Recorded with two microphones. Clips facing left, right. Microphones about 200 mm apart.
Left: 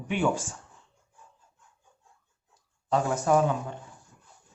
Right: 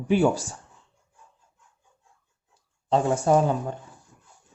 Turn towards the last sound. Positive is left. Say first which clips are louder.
# right 3 dB
turn(degrees=-30)  # may be behind; listen again after turning